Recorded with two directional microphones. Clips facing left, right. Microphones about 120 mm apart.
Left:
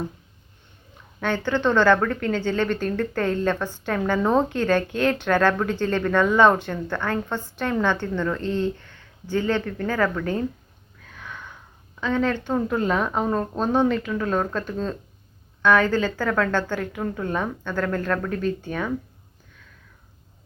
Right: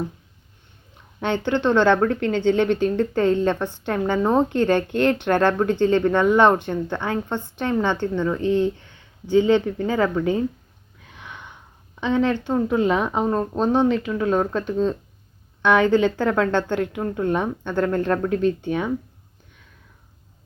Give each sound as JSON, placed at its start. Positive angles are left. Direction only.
{"t": 1.2, "sound": "a woman's voice", "side_deg": -20}
{"t": 11.1, "sound": "a sound", "side_deg": -20}
{"t": 11.9, "sound": "a woman's voice", "side_deg": -20}
{"t": 15.6, "sound": "a woman's voice", "side_deg": -20}